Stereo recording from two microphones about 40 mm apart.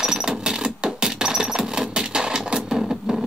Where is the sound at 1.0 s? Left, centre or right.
Centre.